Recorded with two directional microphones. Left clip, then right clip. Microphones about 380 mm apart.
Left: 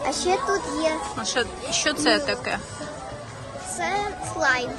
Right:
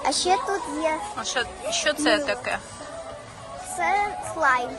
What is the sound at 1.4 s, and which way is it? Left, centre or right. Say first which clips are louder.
Speech: left 1 dB; centre.